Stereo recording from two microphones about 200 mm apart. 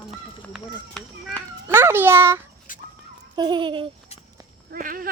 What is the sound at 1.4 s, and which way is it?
Speech, 10° left (ahead or behind).